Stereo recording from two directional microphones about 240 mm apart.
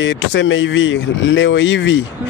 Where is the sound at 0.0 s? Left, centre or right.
Left.